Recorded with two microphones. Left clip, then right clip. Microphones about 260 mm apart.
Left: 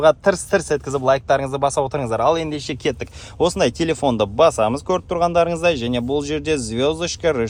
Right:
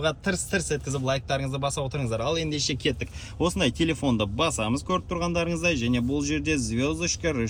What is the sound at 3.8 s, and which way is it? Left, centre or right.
Speech, left.